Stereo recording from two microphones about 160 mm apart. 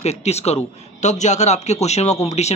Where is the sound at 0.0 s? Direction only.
40° left (ahead or behind).